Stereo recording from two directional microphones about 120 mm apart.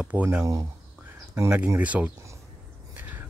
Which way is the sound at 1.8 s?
10° right (ahead or behind).